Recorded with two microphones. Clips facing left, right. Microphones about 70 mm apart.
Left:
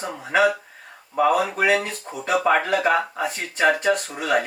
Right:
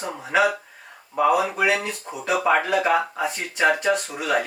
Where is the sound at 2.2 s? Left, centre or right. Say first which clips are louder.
Left 1 dB; centre.